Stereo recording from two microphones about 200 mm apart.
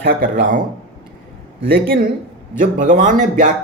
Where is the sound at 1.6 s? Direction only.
50° right (ahead or behind).